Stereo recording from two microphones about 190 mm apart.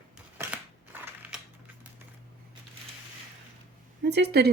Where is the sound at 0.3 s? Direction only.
10° right (ahead or behind).